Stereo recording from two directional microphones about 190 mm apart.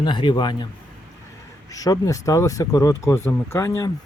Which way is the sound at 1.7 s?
20° left (ahead or behind).